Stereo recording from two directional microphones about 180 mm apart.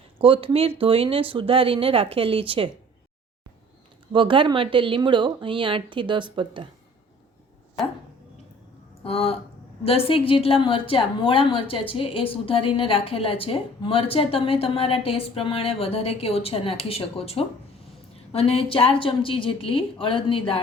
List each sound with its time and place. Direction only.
0.2 s speech: 30° right (ahead or behind)
4.1 s speech: 30° right (ahead or behind)
9.0 s a woman's voice: 35° left (ahead or behind)